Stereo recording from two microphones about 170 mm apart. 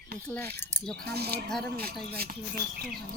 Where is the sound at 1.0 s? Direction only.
70° right (ahead or behind).